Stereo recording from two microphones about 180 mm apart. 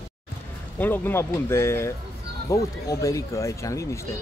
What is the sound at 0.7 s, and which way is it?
Speech, 10° left (ahead or behind).